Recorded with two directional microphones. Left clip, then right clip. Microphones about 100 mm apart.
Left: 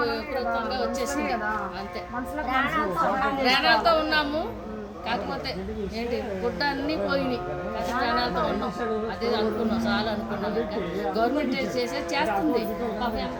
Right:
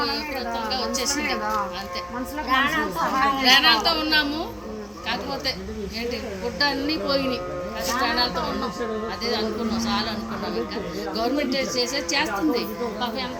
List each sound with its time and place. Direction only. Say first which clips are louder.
0.0 s a woman's voice: even; 20° left (ahead or behind)
2.5 s a woman's voice: right 4 dB; 10° left (ahead or behind)
6.6 s a woman's voice: right 6 dB; 15° left (ahead or behind)